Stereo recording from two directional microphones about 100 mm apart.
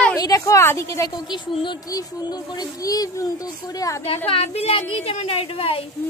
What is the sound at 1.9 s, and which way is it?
Speech, 40° left (ahead or behind).